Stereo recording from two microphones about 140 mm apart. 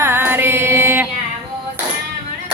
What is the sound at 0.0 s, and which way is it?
Music, 15° right (ahead or behind).